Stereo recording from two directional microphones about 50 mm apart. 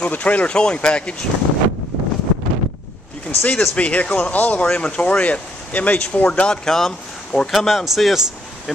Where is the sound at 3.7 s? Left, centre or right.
Left.